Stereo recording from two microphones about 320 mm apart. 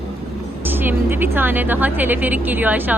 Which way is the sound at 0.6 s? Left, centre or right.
Centre.